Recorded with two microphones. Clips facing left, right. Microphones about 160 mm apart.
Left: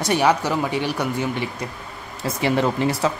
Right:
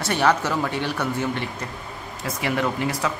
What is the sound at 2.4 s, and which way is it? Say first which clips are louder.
Speech: left 4 dB; 30° left (ahead or behind).